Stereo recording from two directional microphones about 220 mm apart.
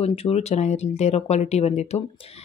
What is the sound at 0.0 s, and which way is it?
Speech, 30° left (ahead or behind).